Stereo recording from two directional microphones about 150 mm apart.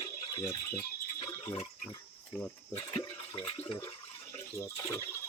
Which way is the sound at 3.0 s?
30° left (ahead or behind).